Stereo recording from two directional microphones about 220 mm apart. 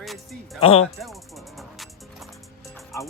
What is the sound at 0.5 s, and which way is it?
Speech, 25° left (ahead or behind).